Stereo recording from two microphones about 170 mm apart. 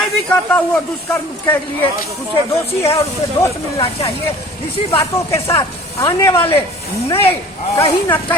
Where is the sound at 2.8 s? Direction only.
20° left (ahead or behind).